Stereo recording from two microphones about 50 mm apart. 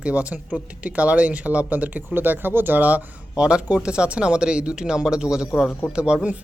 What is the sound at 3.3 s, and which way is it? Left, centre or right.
Speech, centre.